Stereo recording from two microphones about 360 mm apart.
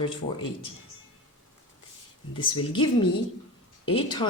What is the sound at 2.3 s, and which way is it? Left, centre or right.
Speech, centre.